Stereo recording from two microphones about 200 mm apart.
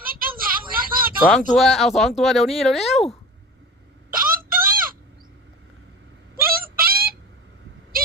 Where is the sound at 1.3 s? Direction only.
Centre (ahead or behind).